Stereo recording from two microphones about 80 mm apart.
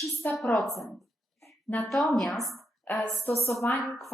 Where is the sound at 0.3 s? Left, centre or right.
Centre.